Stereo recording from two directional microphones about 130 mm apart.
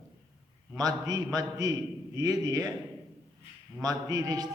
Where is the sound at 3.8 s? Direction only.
30° right (ahead or behind).